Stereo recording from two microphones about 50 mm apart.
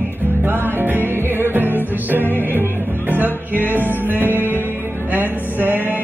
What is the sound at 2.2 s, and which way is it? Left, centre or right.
Music, left.